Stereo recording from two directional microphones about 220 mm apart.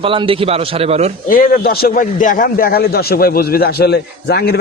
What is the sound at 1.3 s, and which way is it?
A man's voice, 40° left (ahead or behind).